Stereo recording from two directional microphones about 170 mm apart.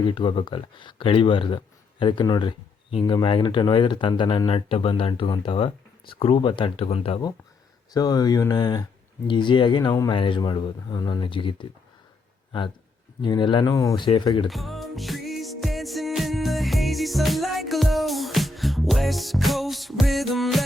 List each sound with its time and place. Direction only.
0.0 s speech: 30° left (ahead or behind)
7.9 s speech: 25° left (ahead or behind)
14.4 s music: centre (ahead or behind)